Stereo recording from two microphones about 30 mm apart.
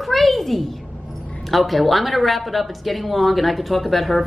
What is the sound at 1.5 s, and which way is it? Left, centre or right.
Speech, centre.